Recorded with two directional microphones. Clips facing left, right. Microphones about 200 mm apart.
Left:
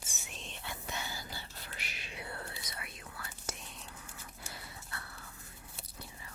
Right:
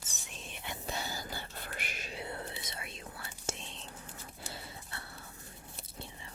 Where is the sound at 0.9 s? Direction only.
35° right (ahead or behind).